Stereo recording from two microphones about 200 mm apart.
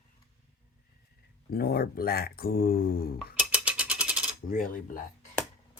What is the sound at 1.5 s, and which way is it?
Speech, 50° left (ahead or behind).